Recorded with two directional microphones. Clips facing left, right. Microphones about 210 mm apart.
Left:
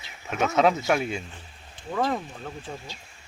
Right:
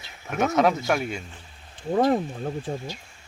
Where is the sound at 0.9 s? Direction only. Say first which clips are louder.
Left 1 dB; 25° left (ahead or behind).